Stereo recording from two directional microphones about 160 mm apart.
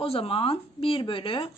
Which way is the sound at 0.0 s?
35° left (ahead or behind).